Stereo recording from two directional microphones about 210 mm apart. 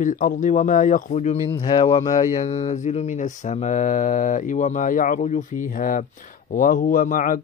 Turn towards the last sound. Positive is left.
turn(degrees=40)  # may be behind; listen again after turning